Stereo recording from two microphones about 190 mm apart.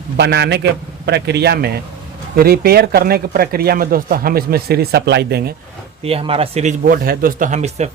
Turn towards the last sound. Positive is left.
turn(degrees=-35)  # may be behind; listen again after turning